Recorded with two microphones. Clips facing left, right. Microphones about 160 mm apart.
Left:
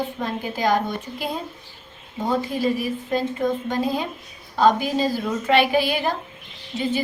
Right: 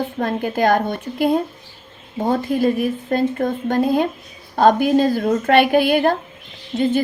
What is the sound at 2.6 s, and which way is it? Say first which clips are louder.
A woman's voice: right 5 dB; 55° right (ahead or behind).